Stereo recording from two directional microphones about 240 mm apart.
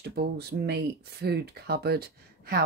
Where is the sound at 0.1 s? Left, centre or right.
Right.